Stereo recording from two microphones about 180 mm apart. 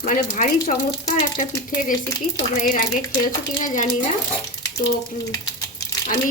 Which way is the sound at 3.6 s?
45° left (ahead or behind).